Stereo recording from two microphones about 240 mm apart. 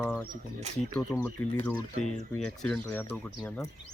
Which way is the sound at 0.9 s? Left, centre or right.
Centre.